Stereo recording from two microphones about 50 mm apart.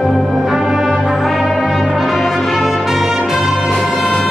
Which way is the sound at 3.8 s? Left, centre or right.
Centre.